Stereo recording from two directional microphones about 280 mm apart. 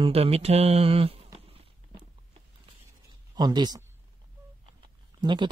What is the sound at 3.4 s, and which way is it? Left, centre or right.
Speech, centre.